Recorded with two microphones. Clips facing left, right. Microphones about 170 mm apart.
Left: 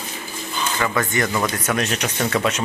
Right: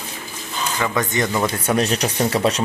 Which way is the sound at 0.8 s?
15° right (ahead or behind).